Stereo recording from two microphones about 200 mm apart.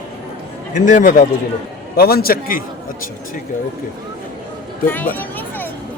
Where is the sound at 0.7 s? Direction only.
40° left (ahead or behind).